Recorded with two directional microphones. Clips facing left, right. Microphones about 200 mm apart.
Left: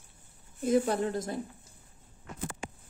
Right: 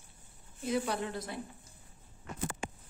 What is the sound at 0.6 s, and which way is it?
Speech, 45° left (ahead or behind).